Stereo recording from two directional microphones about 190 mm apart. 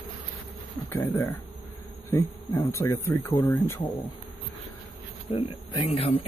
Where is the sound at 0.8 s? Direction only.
10° left (ahead or behind).